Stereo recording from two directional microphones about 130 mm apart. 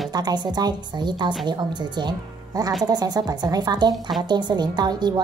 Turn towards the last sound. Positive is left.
turn(degrees=-35)  # may be behind; listen again after turning